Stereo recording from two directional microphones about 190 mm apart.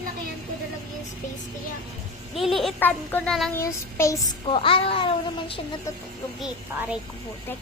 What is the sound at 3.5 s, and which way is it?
Child singing, 15° left (ahead or behind).